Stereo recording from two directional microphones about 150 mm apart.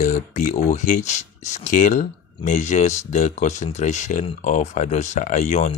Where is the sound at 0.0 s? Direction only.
50° left (ahead or behind).